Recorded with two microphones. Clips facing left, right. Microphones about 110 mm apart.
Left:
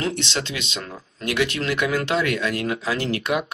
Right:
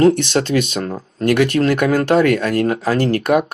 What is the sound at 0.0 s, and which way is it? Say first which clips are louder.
Speech: right 13 dB; 50° right (ahead or behind).